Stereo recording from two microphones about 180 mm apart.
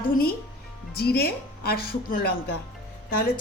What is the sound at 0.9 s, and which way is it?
A woman's voice, 60° left (ahead or behind).